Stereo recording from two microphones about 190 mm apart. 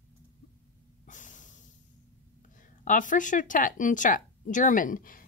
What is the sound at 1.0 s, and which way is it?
Snort, 40° left (ahead or behind).